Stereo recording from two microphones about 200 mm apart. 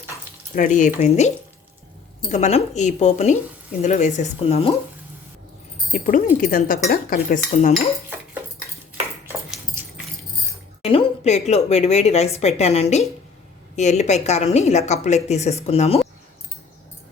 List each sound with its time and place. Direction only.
0.5 s a woman's voice: 40° left (ahead or behind)
2.3 s a woman's voice: 35° left (ahead or behind)
5.9 s a woman's voice: 40° left (ahead or behind)
10.8 s a woman's voice: 30° left (ahead or behind)